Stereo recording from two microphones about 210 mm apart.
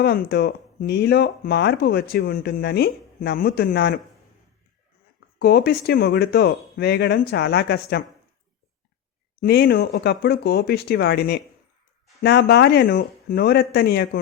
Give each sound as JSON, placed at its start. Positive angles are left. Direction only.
{"t": 0.0, "sound": "speech", "side_deg": 50}
{"t": 5.4, "sound": "speech", "side_deg": 50}
{"t": 9.4, "sound": "speech", "side_deg": 50}